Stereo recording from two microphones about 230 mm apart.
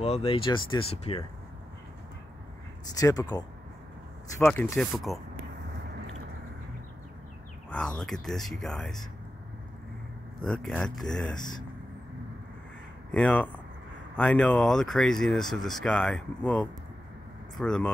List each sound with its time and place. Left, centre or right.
0.0 s speech: left
2.9 s speech: centre
7.7 s speech: centre
10.4 s speech: centre
13.1 s speech: centre